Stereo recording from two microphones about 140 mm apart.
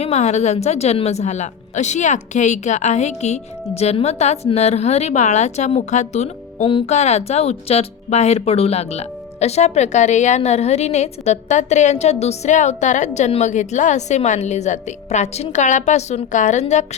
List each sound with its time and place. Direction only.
0.0 s speech: 55° left (ahead or behind)
6.7 s speech: 40° left (ahead or behind)
6.9 s speech: 55° left (ahead or behind)